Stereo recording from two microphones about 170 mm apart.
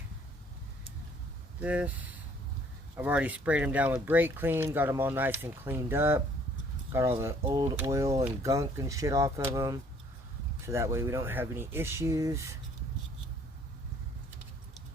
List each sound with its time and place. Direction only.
1.6 s speech: 10° right (ahead or behind)
2.9 s speech: 10° right (ahead or behind)